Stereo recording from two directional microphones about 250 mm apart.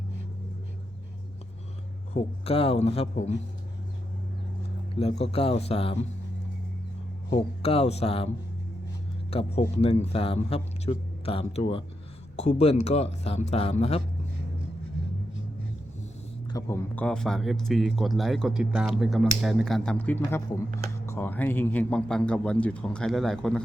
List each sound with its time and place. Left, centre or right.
2.1 s a man's voice: left
4.9 s a man's voice: left
7.3 s a man's voice: left
9.3 s a man's voice: left
16.5 s speech: centre